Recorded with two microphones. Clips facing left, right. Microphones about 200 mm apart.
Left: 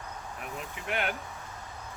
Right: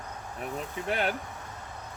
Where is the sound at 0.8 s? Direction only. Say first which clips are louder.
Right 3 dB; 35° right (ahead or behind).